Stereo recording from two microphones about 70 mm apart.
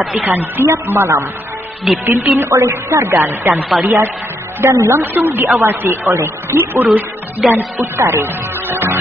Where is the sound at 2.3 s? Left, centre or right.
Right.